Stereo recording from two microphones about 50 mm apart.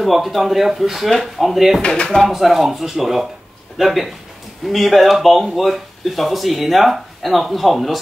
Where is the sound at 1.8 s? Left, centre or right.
Left.